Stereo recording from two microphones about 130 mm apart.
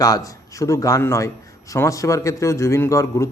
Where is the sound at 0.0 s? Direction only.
25° left (ahead or behind).